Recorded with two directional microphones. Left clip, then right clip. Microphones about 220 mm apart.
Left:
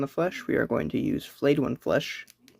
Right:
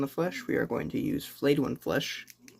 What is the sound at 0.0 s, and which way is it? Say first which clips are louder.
Speech: left 3 dB; 30° left (ahead or behind).